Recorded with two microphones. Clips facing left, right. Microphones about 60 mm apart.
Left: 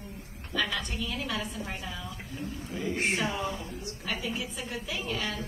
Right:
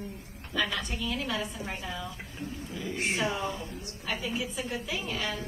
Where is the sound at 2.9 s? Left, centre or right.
Left.